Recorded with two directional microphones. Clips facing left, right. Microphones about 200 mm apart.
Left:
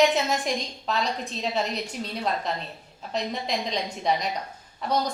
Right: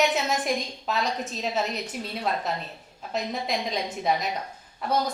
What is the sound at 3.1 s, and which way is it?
A woman's voice, 5° right (ahead or behind).